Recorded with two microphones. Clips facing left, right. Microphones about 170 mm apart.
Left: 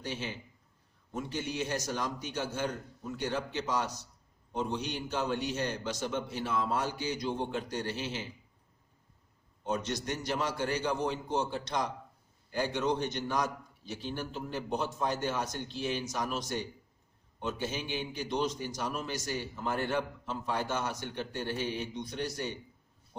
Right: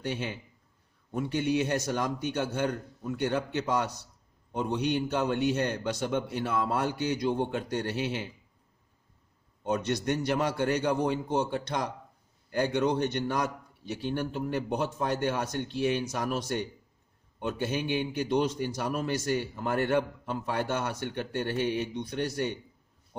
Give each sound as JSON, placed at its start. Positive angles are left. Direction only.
{"t": 0.0, "sound": "a man's voice", "side_deg": -60}
{"t": 9.6, "sound": "a man's voice", "side_deg": -55}